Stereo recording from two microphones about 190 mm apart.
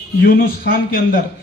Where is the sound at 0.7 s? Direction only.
50° left (ahead or behind).